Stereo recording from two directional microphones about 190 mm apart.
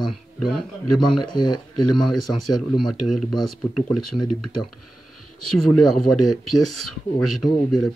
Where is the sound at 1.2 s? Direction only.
20° left (ahead or behind).